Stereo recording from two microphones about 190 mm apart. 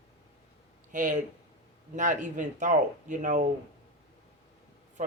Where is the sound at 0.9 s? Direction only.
40° right (ahead or behind).